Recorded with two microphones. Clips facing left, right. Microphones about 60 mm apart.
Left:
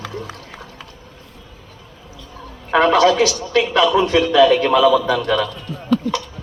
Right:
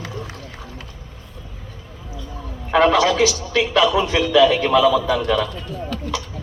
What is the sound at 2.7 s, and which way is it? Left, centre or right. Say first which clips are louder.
A man's voice: left 2 dB; left.